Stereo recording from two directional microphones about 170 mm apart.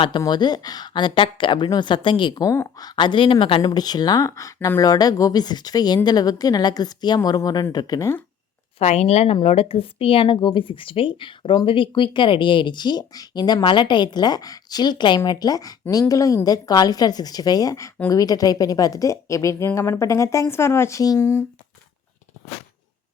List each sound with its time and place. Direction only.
0.2 s speech: 25° left (ahead or behind)
8.8 s a woman's voice: 40° left (ahead or behind); by 21.4 s 15° left (ahead or behind)